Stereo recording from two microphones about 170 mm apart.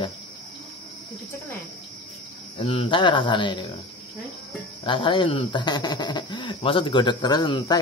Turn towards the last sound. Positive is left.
turn(degrees=25)  # may be behind; listen again after turning